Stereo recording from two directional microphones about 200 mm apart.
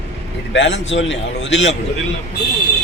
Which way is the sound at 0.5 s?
65° left (ahead or behind).